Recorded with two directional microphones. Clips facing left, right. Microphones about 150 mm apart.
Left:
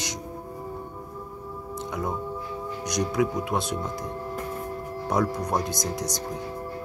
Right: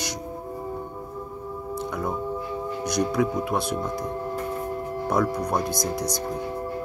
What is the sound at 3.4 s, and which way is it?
Speech, 20° left (ahead or behind).